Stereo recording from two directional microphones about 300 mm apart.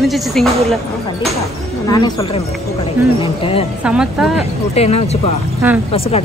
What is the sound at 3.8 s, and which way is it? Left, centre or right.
Speech, centre.